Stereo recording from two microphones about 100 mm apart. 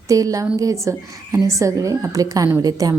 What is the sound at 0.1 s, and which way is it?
A woman's voice, 35° right (ahead or behind).